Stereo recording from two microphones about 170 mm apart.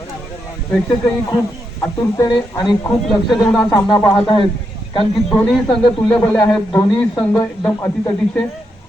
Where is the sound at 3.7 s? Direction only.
20° left (ahead or behind).